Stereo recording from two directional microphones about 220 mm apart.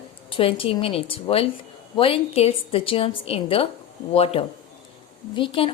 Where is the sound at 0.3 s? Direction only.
25° left (ahead or behind).